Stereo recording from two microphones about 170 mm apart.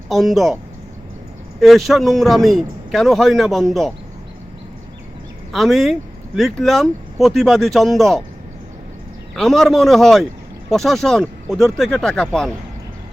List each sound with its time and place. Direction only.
0.1 s speech: centre (ahead or behind)
1.6 s speech: centre (ahead or behind)
5.5 s speech: centre (ahead or behind)
9.3 s speech: centre (ahead or behind)